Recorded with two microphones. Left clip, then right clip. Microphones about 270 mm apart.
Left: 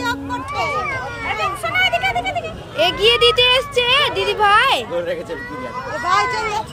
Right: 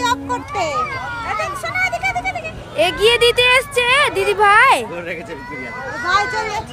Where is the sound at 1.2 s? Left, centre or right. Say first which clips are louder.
Even; centre.